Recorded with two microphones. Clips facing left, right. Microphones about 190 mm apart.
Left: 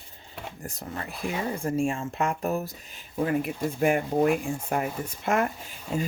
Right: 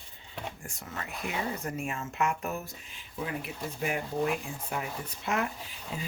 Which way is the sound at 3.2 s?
50° left (ahead or behind).